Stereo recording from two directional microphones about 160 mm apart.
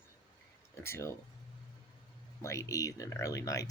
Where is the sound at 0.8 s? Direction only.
15° left (ahead or behind).